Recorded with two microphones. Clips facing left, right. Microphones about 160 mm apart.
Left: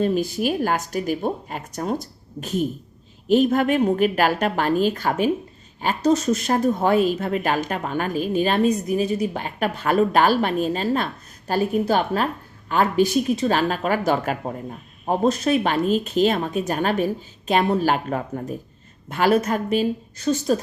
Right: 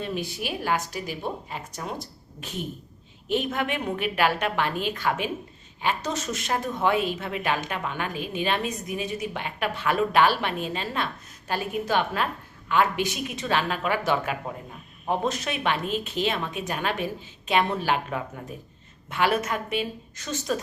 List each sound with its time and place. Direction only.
0.0 s a woman's voice: 40° left (ahead or behind)